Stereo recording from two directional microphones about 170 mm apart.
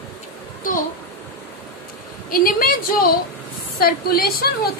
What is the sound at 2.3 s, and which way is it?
A woman's voice, 60° left (ahead or behind).